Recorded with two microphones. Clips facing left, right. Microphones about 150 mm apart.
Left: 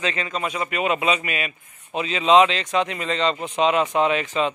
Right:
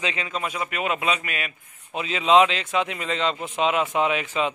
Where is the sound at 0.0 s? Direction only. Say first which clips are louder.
Left 2 dB; 10° right (ahead or behind).